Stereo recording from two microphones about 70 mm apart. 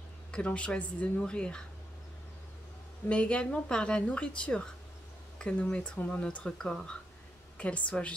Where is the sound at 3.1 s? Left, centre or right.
Centre.